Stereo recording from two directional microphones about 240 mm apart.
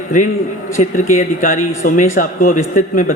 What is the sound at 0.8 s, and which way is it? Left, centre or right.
A man's voice, left.